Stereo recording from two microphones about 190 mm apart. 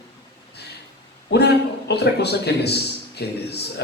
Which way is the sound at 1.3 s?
60° left (ahead or behind).